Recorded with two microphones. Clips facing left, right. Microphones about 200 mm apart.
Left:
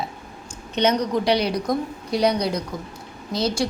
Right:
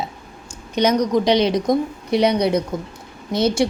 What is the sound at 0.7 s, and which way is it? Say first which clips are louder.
A woman's voice: right 3 dB; 10° right (ahead or behind).